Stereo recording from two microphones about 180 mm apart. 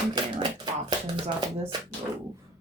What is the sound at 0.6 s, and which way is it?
Shuffling cards, 25° right (ahead or behind).